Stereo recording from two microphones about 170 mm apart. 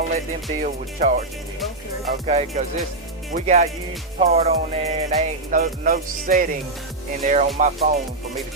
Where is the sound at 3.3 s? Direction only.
40° right (ahead or behind).